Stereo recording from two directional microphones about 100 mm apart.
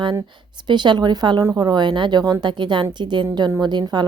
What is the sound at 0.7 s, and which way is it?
A woman's voice, 45° right (ahead or behind).